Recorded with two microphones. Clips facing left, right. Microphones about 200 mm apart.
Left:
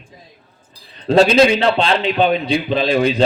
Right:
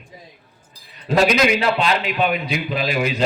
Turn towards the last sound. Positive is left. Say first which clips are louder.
# left 6 dB
turn(degrees=30)  # may be behind; listen again after turning